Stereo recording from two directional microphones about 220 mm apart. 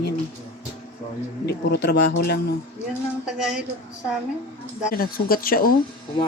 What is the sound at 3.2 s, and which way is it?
Speech, 5° right (ahead or behind).